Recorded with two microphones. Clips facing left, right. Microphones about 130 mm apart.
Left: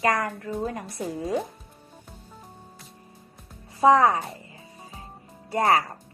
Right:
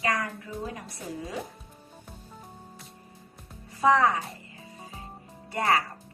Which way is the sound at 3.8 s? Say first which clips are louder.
Left 4 dB; 35° left (ahead or behind).